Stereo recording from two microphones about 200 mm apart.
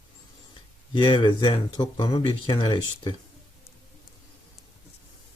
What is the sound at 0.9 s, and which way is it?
Speech, 25° left (ahead or behind).